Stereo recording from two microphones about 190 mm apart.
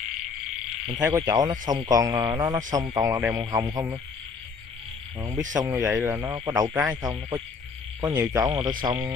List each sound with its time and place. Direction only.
0.9 s speech: 20° right (ahead or behind)
5.5 s speech: 20° right (ahead or behind)
6.7 s speech: 5° right (ahead or behind)
7.0 s speech: 20° right (ahead or behind)